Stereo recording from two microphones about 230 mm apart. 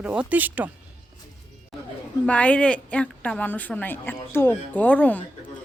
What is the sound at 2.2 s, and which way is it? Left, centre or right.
A woman's voice, centre.